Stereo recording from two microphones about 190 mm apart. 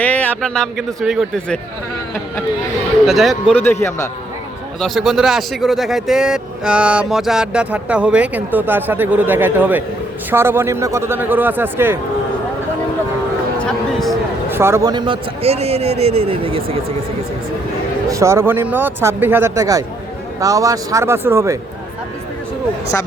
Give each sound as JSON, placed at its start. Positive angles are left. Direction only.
{"t": 0.0, "sound": "a man's voice", "side_deg": 5}
{"t": 3.1, "sound": "a man's voice", "side_deg": 0}
{"t": 3.6, "sound": "a man's voice", "side_deg": 10}
{"t": 4.8, "sound": "a man's voice", "side_deg": 0}
{"t": 13.6, "sound": "speech", "side_deg": 5}
{"t": 14.5, "sound": "a man's voice", "side_deg": -15}
{"t": 18.1, "sound": "speech", "side_deg": -15}